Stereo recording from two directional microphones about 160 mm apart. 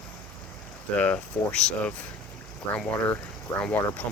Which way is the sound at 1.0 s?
10° left (ahead or behind).